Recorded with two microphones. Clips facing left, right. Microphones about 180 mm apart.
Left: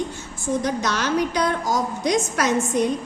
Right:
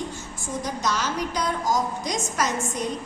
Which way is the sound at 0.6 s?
65° left (ahead or behind).